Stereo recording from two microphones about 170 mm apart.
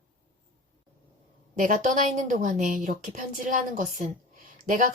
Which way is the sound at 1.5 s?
50° right (ahead or behind).